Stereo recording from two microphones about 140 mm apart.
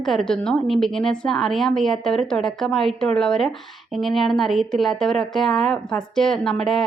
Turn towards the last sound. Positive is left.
turn(degrees=0)  # may be behind; listen again after turning